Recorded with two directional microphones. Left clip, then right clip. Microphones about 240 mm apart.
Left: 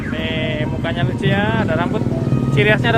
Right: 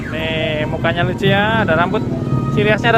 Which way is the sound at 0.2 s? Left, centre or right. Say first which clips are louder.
Right 4 dB; centre.